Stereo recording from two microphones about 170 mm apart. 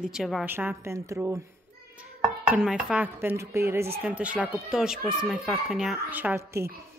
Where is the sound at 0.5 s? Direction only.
10° right (ahead or behind).